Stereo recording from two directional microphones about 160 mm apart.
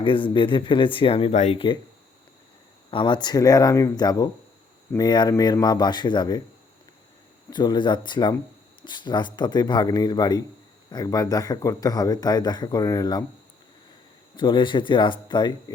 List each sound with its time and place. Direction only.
0.0 s speech: 30° left (ahead or behind)
1.3 s speech: 50° left (ahead or behind)
1.5 s speech: 30° left (ahead or behind)
2.9 s speech: 30° left (ahead or behind)
7.5 s speech: 25° left (ahead or behind)
14.3 s speech: 30° left (ahead or behind)